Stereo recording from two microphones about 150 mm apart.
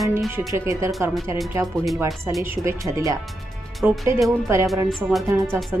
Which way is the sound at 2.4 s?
20° right (ahead or behind).